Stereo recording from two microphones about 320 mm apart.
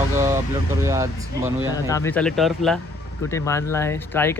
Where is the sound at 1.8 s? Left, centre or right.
Centre.